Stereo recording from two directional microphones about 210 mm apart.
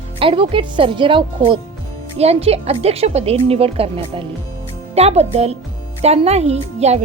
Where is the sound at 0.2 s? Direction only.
25° right (ahead or behind).